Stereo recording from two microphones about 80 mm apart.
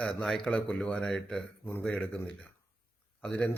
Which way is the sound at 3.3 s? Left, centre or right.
Centre.